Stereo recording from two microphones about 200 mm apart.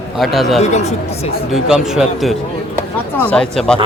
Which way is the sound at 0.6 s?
35° left (ahead or behind).